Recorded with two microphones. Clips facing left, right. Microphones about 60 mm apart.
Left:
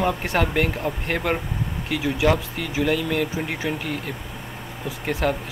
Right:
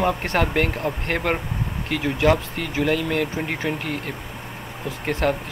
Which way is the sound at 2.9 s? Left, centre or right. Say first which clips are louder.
Even; right.